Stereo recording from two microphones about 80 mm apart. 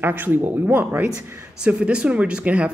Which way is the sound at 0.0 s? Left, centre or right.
Right.